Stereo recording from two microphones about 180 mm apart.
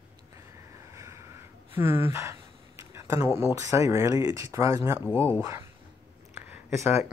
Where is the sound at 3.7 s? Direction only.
15° right (ahead or behind).